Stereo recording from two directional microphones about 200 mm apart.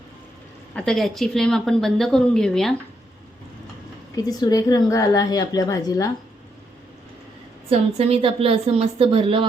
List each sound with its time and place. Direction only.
0.7 s speech: 5° left (ahead or behind)
4.1 s a woman's voice: 20° left (ahead or behind)
7.7 s a woman's voice: 30° right (ahead or behind)